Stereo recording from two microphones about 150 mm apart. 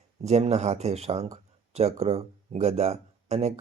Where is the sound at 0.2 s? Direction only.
45° right (ahead or behind).